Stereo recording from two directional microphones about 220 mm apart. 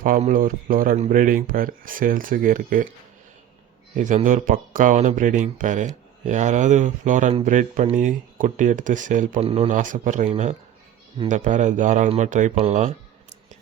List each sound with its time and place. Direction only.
0.0 s speech: 35° right (ahead or behind)
3.9 s speech: 35° right (ahead or behind)